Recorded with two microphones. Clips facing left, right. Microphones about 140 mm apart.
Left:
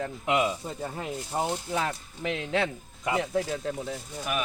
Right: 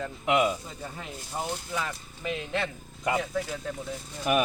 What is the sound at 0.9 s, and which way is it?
Speech, 20° left (ahead or behind).